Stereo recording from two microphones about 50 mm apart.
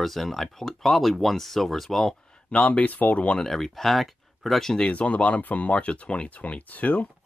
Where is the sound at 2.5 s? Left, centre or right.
Left.